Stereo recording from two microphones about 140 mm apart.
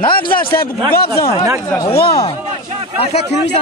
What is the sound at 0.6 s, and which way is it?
Speech, 90° left.